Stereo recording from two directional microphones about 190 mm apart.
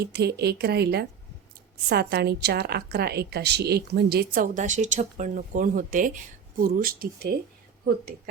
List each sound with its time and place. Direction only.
0.0 s a woman's voice: 60° right (ahead or behind)